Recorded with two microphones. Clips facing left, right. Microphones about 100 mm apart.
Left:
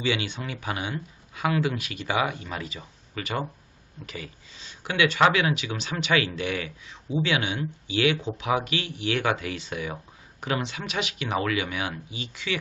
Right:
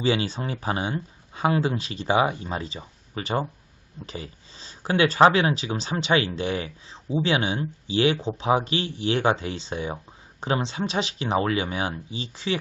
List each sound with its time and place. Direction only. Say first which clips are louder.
0.0 s speech: right 4 dB; 35° right (ahead or behind)